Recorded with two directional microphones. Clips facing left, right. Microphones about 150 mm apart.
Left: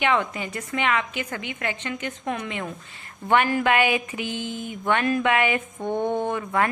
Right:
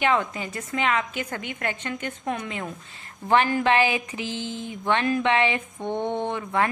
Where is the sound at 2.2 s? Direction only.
30° right (ahead or behind).